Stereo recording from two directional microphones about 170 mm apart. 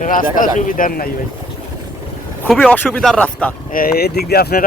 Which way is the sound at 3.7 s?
65° left (ahead or behind).